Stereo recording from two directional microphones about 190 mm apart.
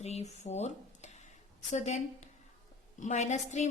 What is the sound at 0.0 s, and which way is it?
A woman's voice, 35° left (ahead or behind).